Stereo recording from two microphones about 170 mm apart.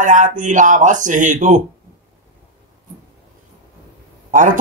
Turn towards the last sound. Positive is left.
turn(degrees=-50)  # may be behind; listen again after turning